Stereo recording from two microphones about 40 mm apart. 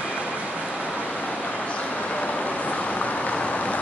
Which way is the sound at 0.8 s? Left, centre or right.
Left.